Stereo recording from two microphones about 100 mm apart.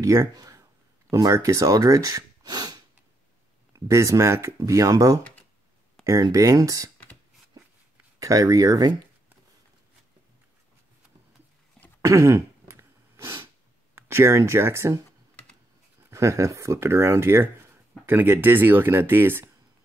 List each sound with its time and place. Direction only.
0.0 s speech: 30° right (ahead or behind)
3.8 s speech: 30° right (ahead or behind)
6.0 s a sound: 5° left (ahead or behind)
6.3 s speech: 35° right (ahead or behind)
8.2 s speech: 35° right (ahead or behind)
12.0 s throat clearing: 30° right (ahead or behind)
13.9 s speech: 25° right (ahead or behind)
16.1 s speech: 30° right (ahead or behind)